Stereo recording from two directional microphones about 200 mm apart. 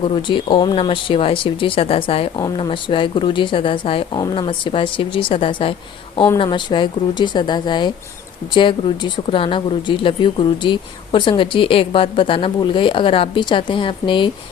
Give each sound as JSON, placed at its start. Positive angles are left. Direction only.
{"t": 0.2, "sound": "speech", "side_deg": 25}